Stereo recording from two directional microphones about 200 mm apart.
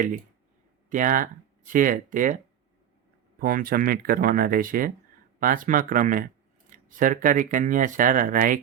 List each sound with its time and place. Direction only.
0.9 s speech: 40° right (ahead or behind)
3.4 s speech: 45° right (ahead or behind)